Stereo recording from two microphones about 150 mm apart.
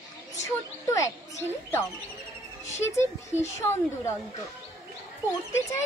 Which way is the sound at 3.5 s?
20° left (ahead or behind).